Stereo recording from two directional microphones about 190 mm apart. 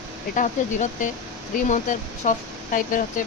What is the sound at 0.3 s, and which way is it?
Speech, 45° left (ahead or behind).